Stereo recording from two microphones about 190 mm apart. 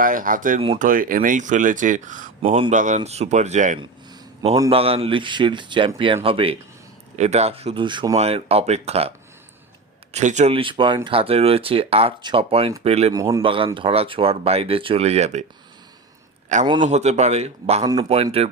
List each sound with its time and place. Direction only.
0.0 s speech: 45° right (ahead or behind)
10.2 s speech: 35° right (ahead or behind)
16.5 s speech: 40° right (ahead or behind)